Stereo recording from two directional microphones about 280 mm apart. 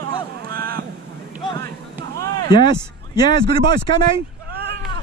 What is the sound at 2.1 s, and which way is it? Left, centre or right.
Speech, centre.